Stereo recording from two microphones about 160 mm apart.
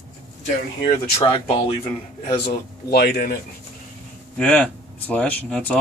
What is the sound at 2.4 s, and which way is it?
Speech, 80° left.